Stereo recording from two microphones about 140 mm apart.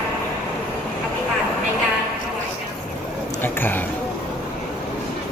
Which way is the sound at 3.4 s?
15° left (ahead or behind).